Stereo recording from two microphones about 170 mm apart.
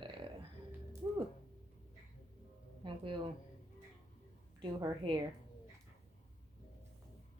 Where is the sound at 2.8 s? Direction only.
30° right (ahead or behind).